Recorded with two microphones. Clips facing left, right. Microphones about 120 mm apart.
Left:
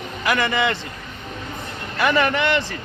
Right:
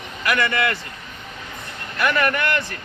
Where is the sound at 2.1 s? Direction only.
25° left (ahead or behind).